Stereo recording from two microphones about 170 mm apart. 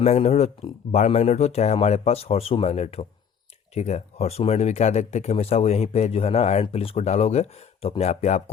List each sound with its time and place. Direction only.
0.0 s speech: 40° left (ahead or behind)